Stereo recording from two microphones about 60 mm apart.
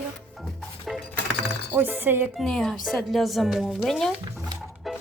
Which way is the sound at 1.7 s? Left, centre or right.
Right.